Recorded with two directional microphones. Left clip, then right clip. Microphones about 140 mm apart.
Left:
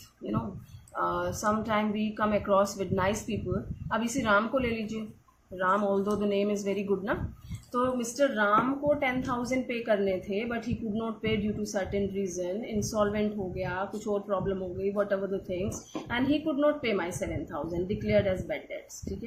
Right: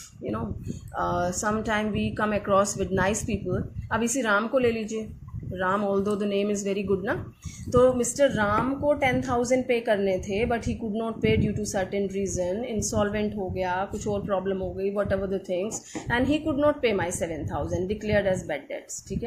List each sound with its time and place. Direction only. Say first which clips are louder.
0.9 s a woman's voice: right 3 dB; 45° right (ahead or behind)